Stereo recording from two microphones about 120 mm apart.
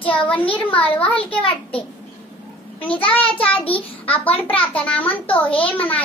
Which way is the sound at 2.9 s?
50° left (ahead or behind).